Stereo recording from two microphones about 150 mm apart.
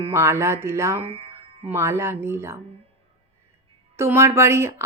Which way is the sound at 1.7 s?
15° right (ahead or behind).